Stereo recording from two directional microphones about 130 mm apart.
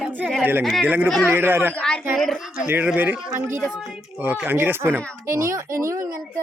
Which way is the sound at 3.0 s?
15° right (ahead or behind).